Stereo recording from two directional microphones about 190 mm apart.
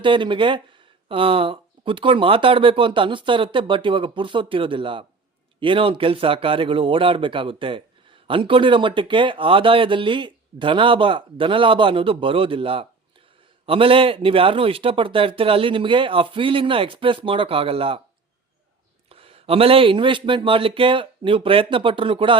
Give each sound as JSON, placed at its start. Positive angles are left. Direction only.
{"t": 0.0, "sound": "speech", "side_deg": -25}
{"t": 19.0, "sound": "speech", "side_deg": -30}